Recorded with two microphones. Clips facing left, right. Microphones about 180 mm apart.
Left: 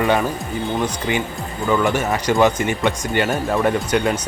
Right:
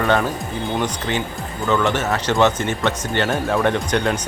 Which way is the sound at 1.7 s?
10° left (ahead or behind).